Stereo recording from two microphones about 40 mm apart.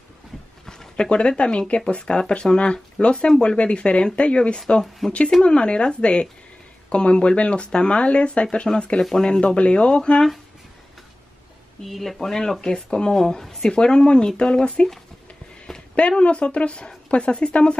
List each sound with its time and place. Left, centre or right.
0.7 s a woman's voice: centre
5.0 s speech: centre
5.4 s a woman's voice: left
11.8 s speech: centre
12.2 s a woman's voice: centre
15.9 s a woman's voice: left